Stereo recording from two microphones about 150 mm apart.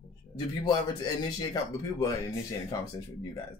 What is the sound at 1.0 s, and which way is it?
Speech, 25° left (ahead or behind).